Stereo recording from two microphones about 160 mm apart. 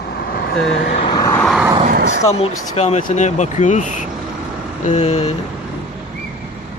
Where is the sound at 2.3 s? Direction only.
40° left (ahead or behind).